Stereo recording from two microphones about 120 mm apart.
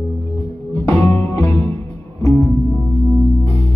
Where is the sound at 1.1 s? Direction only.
20° left (ahead or behind).